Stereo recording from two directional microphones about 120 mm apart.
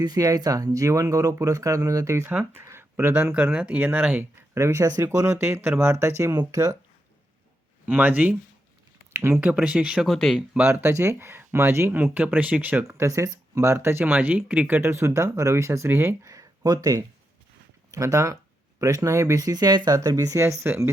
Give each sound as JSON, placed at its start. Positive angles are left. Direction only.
{"t": 0.0, "sound": "speech", "side_deg": -30}
{"t": 7.9, "sound": "speech", "side_deg": -15}
{"t": 10.1, "sound": "speech", "side_deg": 0}
{"t": 10.6, "sound": "speech", "side_deg": -20}